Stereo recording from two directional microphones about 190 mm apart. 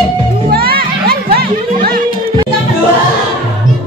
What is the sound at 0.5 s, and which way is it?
Music, 55° right (ahead or behind).